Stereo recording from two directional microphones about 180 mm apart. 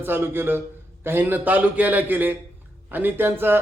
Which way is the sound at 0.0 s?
10° right (ahead or behind).